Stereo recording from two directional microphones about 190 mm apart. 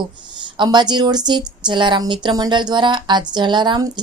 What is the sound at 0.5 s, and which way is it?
Speech, 25° right (ahead or behind).